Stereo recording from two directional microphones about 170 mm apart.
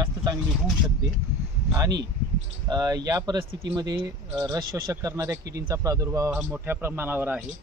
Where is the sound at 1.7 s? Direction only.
20° right (ahead or behind).